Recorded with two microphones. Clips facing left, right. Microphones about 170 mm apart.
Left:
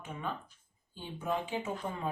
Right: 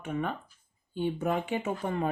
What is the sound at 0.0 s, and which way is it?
Speech, 65° right (ahead or behind).